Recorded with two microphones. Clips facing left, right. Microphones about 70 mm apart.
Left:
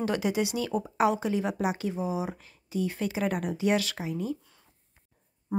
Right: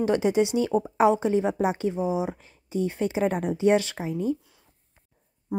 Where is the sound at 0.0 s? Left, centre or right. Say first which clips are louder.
Right 6 dB; right.